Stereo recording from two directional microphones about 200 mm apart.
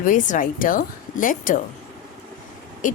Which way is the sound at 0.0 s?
40° left (ahead or behind).